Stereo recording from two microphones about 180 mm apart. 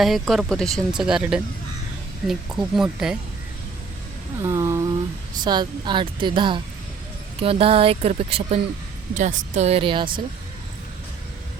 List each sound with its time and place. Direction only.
0.0 s speech: centre (ahead or behind)
2.7 s speech: 5° right (ahead or behind)
4.4 s speech: 15° right (ahead or behind)